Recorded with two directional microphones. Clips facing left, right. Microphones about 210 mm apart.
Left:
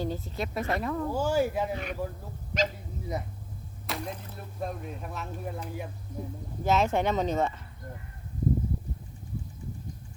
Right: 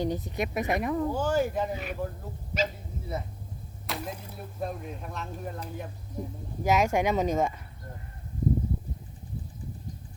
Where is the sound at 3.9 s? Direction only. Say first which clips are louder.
Even; 5° right (ahead or behind).